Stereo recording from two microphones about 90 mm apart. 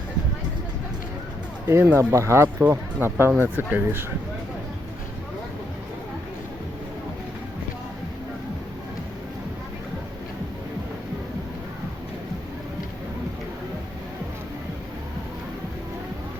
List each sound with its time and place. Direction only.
1.6 s speech: 30° right (ahead or behind)